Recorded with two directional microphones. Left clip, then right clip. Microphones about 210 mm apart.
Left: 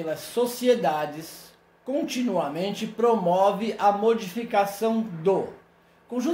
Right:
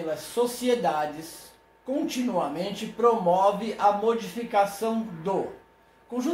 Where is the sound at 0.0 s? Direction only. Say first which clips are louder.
Left 1 dB; 50° left (ahead or behind).